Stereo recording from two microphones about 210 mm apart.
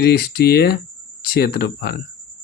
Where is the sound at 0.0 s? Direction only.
50° left (ahead or behind).